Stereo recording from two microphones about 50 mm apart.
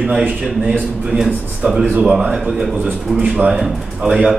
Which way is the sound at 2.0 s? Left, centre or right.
Centre.